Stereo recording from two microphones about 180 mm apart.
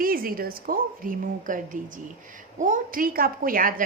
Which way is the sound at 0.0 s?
55° right (ahead or behind).